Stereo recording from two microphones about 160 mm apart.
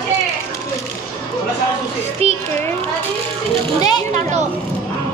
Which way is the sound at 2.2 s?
40° right (ahead or behind).